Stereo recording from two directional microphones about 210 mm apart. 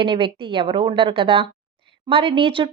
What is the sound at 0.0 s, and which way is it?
A woman's voice, 25° right (ahead or behind).